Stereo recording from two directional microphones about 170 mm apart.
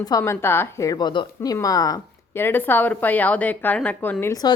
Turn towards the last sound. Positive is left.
turn(degrees=20)  # may be behind; listen again after turning